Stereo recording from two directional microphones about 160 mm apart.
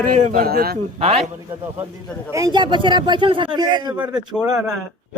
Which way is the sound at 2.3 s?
25° right (ahead or behind).